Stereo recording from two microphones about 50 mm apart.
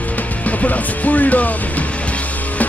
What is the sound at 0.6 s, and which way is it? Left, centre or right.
Music, left.